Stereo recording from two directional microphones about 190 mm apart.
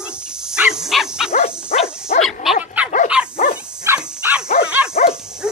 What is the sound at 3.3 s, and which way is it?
Dog, 30° left (ahead or behind).